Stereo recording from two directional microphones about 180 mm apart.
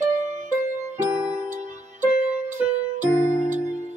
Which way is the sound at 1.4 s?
45° right (ahead or behind).